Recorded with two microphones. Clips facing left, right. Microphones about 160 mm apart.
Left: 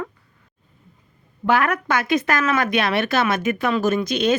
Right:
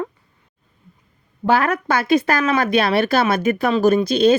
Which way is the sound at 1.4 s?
30° right (ahead or behind).